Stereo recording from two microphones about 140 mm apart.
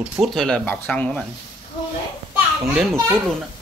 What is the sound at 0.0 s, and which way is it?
Speech, centre (ahead or behind).